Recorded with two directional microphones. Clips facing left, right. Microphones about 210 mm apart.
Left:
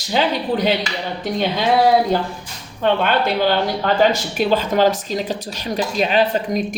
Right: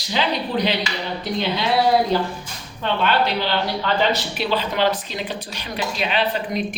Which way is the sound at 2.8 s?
50° left (ahead or behind).